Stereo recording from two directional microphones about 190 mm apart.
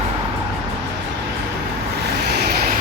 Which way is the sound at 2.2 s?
60° right (ahead or behind).